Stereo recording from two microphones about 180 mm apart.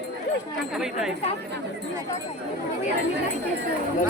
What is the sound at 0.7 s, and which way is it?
Speech, centre (ahead or behind).